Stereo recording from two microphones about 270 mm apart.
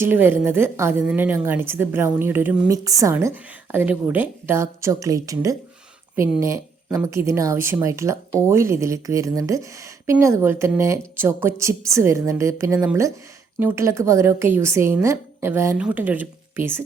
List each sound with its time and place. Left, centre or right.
0.0 s a woman's voice: centre